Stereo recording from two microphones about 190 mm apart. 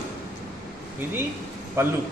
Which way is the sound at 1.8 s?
15° right (ahead or behind).